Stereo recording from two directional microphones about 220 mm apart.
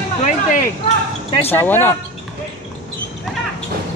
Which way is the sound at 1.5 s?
10° left (ahead or behind).